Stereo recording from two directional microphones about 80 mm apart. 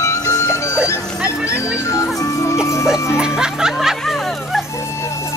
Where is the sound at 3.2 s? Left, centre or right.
Centre.